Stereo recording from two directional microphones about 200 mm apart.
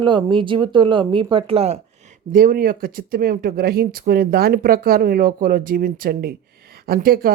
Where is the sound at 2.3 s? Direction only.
45° right (ahead or behind).